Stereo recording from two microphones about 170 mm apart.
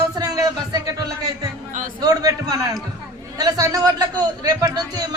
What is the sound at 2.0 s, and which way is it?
A man's voice, 20° right (ahead or behind).